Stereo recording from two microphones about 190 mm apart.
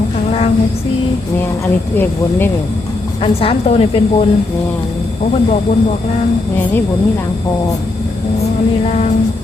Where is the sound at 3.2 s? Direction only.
30° left (ahead or behind).